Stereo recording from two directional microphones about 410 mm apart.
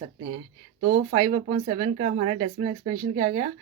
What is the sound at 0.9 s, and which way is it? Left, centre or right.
Speech, centre.